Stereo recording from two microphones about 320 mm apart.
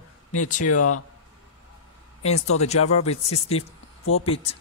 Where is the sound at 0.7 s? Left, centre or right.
Left.